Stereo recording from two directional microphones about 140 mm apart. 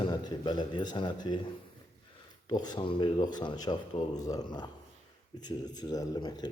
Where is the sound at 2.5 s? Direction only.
30° left (ahead or behind).